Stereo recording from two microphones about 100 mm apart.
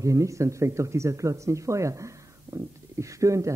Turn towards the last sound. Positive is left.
turn(degrees=-30)  # may be behind; listen again after turning